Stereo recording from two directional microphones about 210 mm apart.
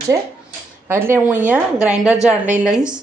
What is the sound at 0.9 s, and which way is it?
Speech, 10° right (ahead or behind).